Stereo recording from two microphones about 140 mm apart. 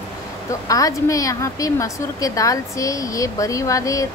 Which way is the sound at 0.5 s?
25° left (ahead or behind).